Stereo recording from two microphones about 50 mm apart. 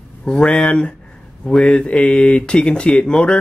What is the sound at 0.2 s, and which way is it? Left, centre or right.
Speech, centre.